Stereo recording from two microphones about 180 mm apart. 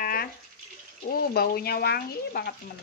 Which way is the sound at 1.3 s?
60° left (ahead or behind).